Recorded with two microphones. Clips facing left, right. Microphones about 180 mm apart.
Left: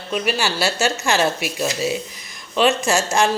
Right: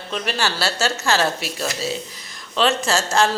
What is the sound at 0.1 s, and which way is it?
A woman's voice, 10° left (ahead or behind).